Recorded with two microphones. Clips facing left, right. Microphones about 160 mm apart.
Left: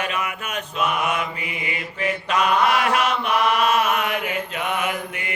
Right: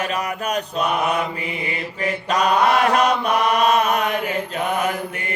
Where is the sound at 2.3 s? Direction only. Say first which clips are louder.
Right 2 dB; 35° right (ahead or behind).